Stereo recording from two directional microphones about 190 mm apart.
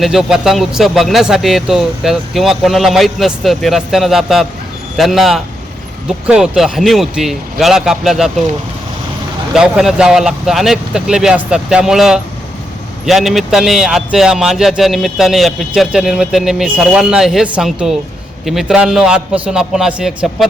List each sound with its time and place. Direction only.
0.0 s a man's voice: 5° right (ahead or behind)
9.6 s a man's voice: 5° right (ahead or behind)